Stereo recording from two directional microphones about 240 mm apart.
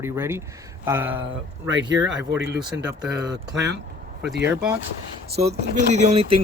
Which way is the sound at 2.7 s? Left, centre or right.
Centre.